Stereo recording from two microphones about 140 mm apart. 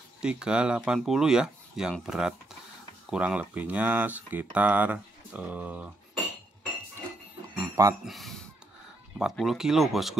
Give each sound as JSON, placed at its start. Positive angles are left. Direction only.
{"t": 0.2, "sound": "speech", "side_deg": -5}
{"t": 7.6, "sound": "a sound", "side_deg": -20}
{"t": 8.0, "sound": "speech", "side_deg": 0}